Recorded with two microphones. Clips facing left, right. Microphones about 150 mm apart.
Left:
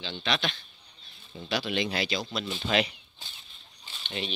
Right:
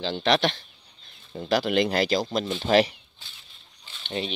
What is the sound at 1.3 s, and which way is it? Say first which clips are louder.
Speech: right 8 dB; 50° right (ahead or behind).